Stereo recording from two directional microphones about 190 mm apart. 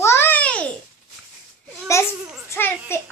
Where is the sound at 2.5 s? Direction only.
10° left (ahead or behind).